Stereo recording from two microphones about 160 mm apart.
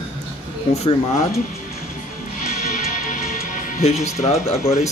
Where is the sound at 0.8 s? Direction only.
40° left (ahead or behind).